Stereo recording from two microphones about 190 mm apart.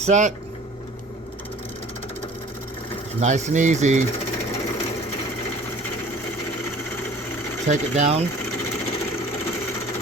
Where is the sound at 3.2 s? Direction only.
40° right (ahead or behind).